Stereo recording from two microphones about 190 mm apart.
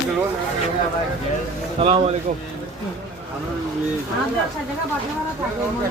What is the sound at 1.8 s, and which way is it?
Speech, 30° right (ahead or behind).